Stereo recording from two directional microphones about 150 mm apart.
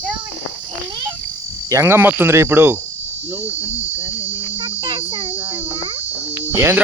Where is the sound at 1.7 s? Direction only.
20° right (ahead or behind).